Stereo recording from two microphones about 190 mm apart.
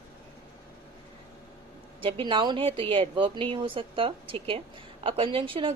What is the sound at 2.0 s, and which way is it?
A woman's voice, 25° right (ahead or behind).